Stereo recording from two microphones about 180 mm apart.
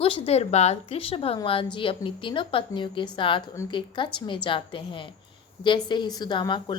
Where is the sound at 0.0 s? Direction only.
35° left (ahead or behind).